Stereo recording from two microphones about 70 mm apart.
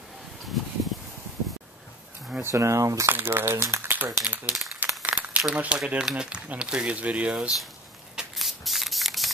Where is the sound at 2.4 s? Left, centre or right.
Right.